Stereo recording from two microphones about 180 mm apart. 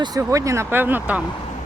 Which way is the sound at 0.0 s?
20° right (ahead or behind).